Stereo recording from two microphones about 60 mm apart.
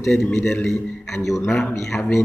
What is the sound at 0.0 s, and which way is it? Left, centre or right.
A man's voice, centre.